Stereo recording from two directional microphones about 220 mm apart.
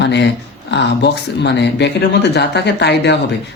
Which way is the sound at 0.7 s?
50° left (ahead or behind).